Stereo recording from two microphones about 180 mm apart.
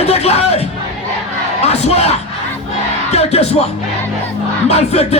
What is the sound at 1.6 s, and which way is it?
Speech, 35° left (ahead or behind).